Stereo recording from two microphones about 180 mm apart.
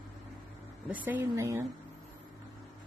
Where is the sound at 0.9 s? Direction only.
15° right (ahead or behind).